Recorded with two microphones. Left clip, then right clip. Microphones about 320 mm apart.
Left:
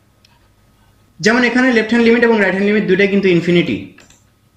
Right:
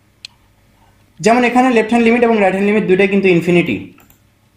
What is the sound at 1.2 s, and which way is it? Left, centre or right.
A man's voice, centre.